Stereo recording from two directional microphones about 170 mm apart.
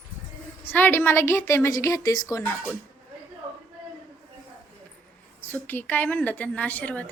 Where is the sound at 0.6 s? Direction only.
10° left (ahead or behind).